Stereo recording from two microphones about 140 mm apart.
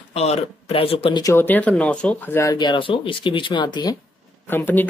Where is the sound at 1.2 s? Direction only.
15° left (ahead or behind).